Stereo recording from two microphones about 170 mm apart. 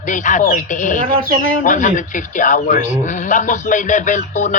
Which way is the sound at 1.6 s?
50° left (ahead or behind).